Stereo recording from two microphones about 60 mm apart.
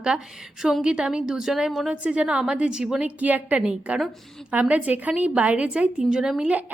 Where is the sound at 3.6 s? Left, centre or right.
Centre.